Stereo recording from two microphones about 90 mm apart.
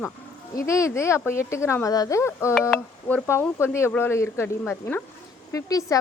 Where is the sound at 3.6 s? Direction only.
30° left (ahead or behind).